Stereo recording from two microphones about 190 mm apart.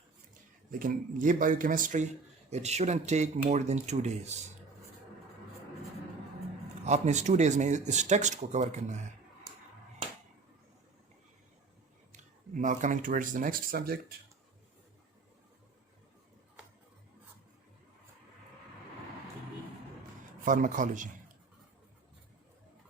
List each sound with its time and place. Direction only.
0.7 s speech: 45° right (ahead or behind)
6.8 s speech: 35° right (ahead or behind)
12.1 s speech: 40° right (ahead or behind)
20.4 s speech: 45° right (ahead or behind)